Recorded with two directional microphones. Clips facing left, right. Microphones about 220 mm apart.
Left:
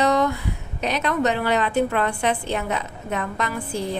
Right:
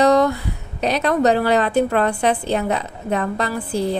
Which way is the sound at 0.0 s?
35° right (ahead or behind).